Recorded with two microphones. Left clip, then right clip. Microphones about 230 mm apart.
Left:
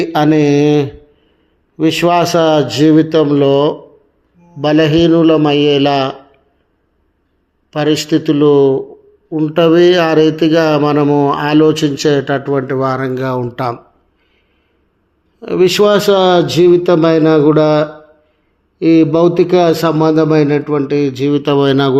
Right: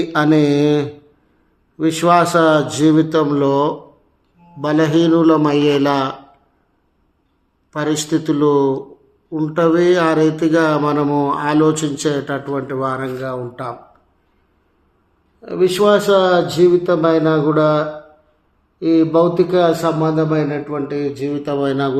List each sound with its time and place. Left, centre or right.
0.0 s a man's voice: centre
7.7 s a man's voice: centre
9.6 s speech: left
13.1 s a man's voice: left
15.4 s a man's voice: left